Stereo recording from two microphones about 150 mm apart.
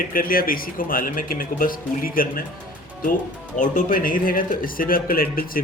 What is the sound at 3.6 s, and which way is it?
Speech, 60° left (ahead or behind).